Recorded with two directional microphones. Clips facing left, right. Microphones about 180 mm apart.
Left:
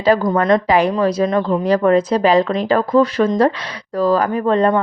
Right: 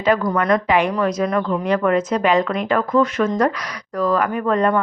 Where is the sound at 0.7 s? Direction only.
35° left (ahead or behind).